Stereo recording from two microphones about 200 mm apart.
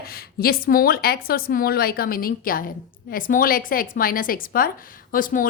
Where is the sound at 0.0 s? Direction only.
50° left (ahead or behind).